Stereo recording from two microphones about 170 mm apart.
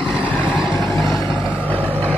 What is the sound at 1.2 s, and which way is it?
Vehicle, 10° left (ahead or behind).